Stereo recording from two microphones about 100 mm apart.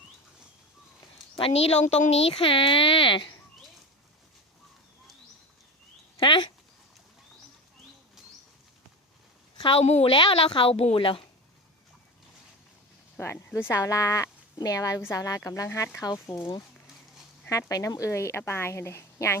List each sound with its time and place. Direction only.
1.4 s speech: 80° left; by 3.2 s 60° left (ahead or behind)
6.1 s a sound: 50° left (ahead or behind)
9.7 s speech: 85° left; by 11.2 s 60° left (ahead or behind)
13.1 s speech: 25° left (ahead or behind)
17.5 s a woman's voice: 35° left (ahead or behind)